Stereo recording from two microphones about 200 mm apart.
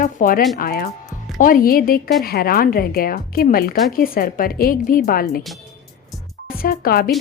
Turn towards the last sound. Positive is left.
turn(degrees=50)  # may be behind; listen again after turning